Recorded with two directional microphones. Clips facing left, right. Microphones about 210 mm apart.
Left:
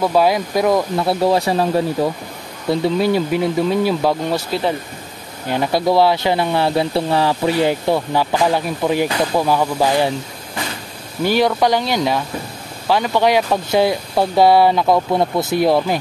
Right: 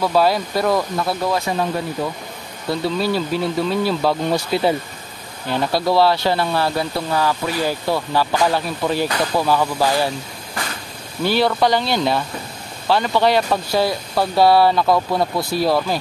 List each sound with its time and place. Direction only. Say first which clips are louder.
0.0 s speech: left 2 dB; 15° left (ahead or behind)
0.9 s speech: left 5 dB; 30° left (ahead or behind)
2.7 s speech: left 4 dB; 20° left (ahead or behind)
5.5 s speech: left 2 dB; 15° left (ahead or behind)
11.2 s speech: left 2 dB; 15° left (ahead or behind)